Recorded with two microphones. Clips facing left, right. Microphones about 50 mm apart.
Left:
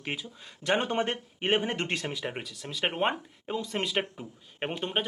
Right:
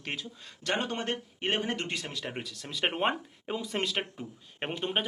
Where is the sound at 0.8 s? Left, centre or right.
Left.